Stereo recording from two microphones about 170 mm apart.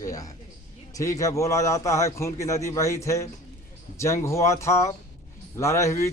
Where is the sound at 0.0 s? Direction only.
20° left (ahead or behind).